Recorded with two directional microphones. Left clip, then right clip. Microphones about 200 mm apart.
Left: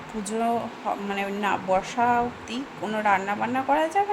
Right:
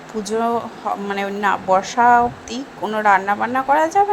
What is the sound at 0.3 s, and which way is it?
Speech, 25° right (ahead or behind).